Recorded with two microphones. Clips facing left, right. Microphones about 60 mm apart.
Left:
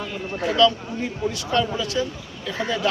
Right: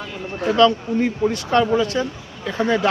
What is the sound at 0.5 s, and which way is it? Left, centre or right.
Speech, right.